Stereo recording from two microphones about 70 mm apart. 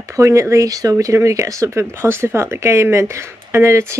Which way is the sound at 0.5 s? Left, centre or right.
Right.